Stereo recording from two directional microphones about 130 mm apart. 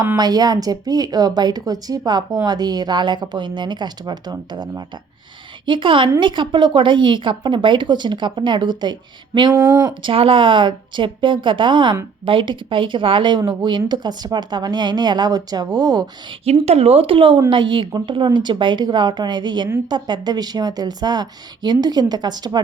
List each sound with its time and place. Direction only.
0.2 s speech: 30° right (ahead or behind)
16.4 s speech: 55° right (ahead or behind); by 22.6 s 35° right (ahead or behind)